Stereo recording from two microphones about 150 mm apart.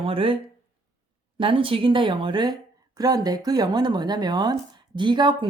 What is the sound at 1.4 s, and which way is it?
A woman's voice, 35° right (ahead or behind).